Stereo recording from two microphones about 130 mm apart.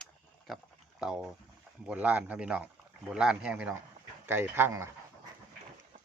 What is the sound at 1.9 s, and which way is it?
Speech, 10° right (ahead or behind).